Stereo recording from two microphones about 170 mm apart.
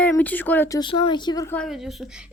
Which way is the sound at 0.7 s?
30° left (ahead or behind).